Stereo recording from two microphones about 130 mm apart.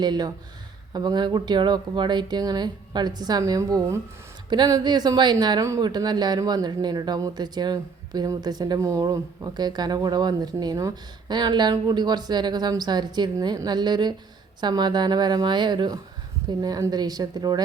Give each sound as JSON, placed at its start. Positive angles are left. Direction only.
{"t": 0.0, "sound": "a woman's voice", "side_deg": -35}